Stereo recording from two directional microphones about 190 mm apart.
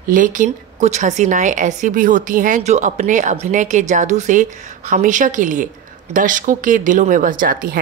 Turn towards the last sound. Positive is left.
turn(degrees=-50)  # may be behind; listen again after turning